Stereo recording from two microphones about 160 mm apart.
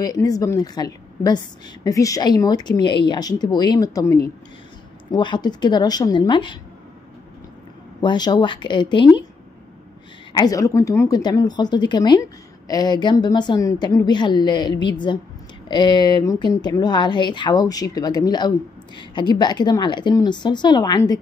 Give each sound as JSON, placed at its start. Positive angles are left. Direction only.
{"t": 0.0, "sound": "speech", "side_deg": 20}
{"t": 8.0, "sound": "speech", "side_deg": 25}
{"t": 10.3, "sound": "speech", "side_deg": 25}